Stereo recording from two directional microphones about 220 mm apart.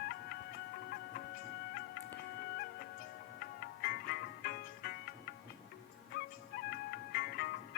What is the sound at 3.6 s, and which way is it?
Music, 45° left (ahead or behind).